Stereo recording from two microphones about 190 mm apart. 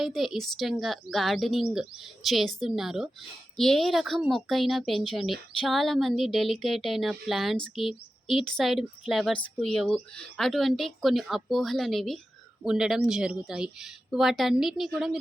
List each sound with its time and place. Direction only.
0.0 s speech: centre (ahead or behind)